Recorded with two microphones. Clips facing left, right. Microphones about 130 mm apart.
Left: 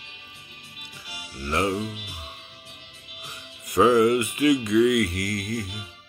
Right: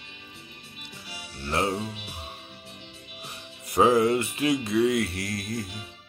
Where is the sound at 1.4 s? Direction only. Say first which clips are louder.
Left 2 dB; 30° right (ahead or behind).